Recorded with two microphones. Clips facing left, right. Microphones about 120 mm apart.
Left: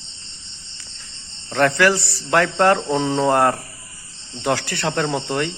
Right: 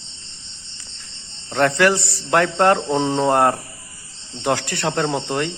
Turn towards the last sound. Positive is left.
turn(degrees=-20)  # may be behind; listen again after turning